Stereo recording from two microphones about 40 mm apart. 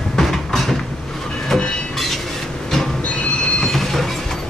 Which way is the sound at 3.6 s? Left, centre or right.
Centre.